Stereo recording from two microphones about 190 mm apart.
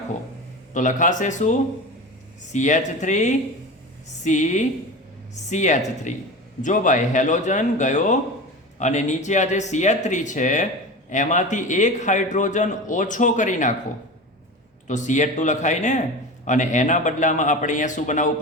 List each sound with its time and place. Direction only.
0.7 s a man's voice: 40° left (ahead or behind)
14.8 s a man's voice: 40° left (ahead or behind)